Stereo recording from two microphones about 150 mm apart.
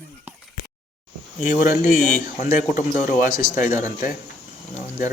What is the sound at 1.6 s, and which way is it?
Speech, 65° left (ahead or behind).